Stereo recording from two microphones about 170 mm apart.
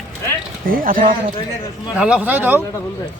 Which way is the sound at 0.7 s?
55° right (ahead or behind).